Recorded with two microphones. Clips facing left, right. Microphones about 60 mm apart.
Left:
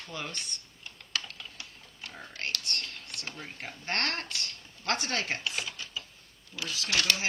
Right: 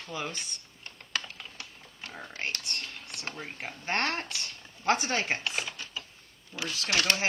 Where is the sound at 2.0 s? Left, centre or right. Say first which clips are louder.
Right 2 dB; centre.